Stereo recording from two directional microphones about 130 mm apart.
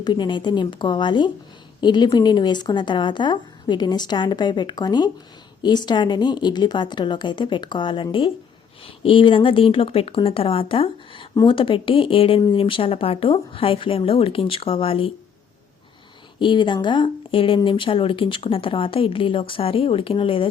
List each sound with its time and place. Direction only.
0.0 s speech: 35° left (ahead or behind)
16.4 s speech: 35° left (ahead or behind)